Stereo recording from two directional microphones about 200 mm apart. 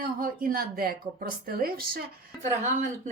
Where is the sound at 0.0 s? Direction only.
45° right (ahead or behind).